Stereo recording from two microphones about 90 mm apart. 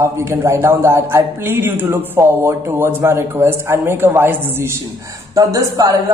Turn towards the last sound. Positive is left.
turn(degrees=-40)  # may be behind; listen again after turning